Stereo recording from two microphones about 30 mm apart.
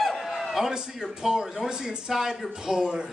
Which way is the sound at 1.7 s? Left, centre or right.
Right.